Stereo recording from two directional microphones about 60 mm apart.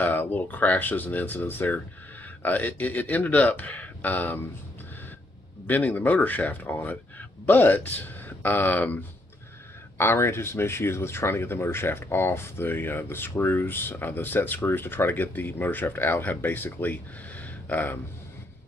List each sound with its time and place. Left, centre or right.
0.0 s speech: left
5.9 s speech: left
9.9 s speech: left